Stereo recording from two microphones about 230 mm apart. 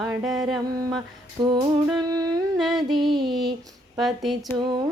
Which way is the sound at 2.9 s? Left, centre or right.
Right.